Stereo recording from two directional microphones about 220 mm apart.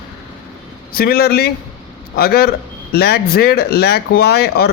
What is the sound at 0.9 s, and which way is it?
Speech, 45° left (ahead or behind).